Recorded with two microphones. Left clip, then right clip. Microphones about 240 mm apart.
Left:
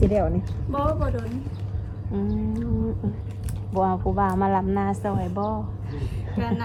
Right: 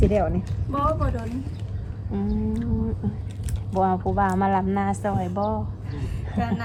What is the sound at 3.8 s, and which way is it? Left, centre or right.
A woman's voice, right.